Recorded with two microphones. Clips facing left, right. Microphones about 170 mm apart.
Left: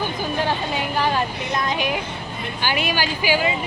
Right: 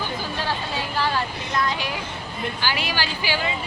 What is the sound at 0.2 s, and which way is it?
Vehicle, 15° left (ahead or behind).